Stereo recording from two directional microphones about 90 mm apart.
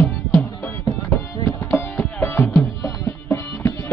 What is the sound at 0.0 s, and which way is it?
Music, 25° left (ahead or behind).